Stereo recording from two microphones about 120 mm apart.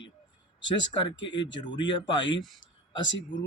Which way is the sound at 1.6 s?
40° left (ahead or behind).